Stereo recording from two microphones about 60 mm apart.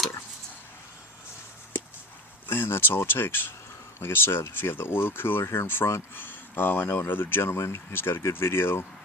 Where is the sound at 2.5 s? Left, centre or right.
Left.